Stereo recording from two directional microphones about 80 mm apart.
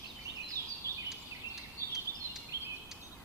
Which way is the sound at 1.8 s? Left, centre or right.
Right.